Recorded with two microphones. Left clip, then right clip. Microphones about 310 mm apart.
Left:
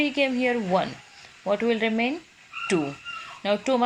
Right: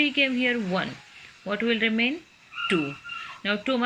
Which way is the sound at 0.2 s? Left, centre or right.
Centre.